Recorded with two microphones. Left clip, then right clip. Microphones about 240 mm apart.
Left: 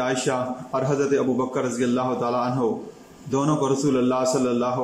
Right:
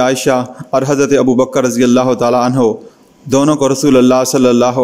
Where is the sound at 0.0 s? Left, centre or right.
Right.